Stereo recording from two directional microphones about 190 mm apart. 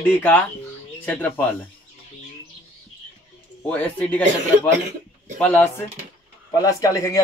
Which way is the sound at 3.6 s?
10° left (ahead or behind).